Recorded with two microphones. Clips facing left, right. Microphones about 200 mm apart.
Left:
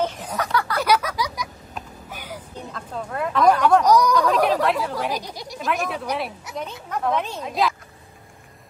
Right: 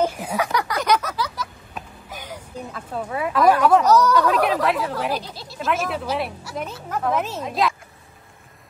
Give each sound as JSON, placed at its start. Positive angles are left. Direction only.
{"t": 0.0, "sound": "a sound", "side_deg": -10}
{"t": 0.7, "sound": "a sound", "side_deg": 10}
{"t": 2.7, "sound": "speech", "side_deg": -5}
{"t": 3.8, "sound": "speech", "side_deg": 10}
{"t": 4.3, "sound": "speech", "side_deg": -5}
{"t": 5.1, "sound": "speech", "side_deg": 15}
{"t": 5.6, "sound": "speech", "side_deg": 0}